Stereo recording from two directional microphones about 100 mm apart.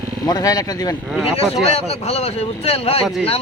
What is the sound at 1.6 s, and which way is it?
Speech, 90° left.